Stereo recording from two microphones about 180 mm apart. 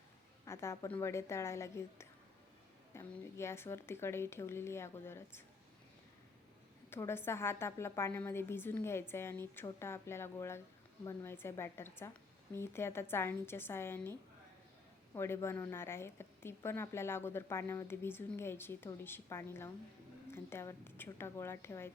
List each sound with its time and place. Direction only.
0.4 s a woman's voice: 15° left (ahead or behind)
6.9 s a woman's voice: 15° left (ahead or behind)
15.1 s a woman's voice: 15° left (ahead or behind)